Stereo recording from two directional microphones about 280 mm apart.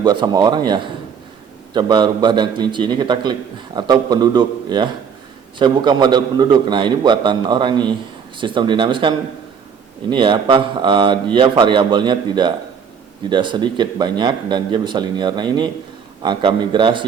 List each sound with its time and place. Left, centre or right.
0.0 s a man's voice: centre